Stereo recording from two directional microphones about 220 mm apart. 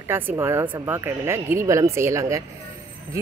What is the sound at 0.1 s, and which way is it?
Speech, 10° right (ahead or behind).